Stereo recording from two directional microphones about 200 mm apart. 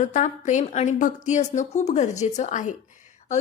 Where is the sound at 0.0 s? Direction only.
40° left (ahead or behind).